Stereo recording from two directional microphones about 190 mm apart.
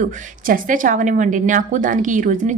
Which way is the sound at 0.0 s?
45° right (ahead or behind).